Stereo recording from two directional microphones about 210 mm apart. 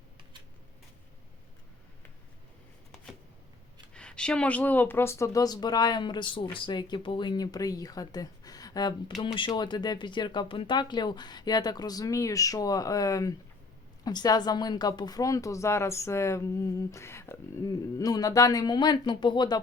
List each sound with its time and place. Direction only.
3.9 s a woman's voice: 5° left (ahead or behind); by 19.6 s 20° left (ahead or behind)